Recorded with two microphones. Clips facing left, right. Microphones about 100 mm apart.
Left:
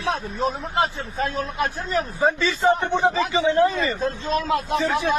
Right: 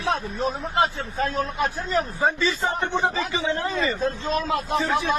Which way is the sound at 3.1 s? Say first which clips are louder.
Left 6 dB; 20° left (ahead or behind).